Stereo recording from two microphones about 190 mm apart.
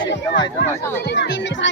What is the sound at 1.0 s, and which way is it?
Speech, 60° left (ahead or behind).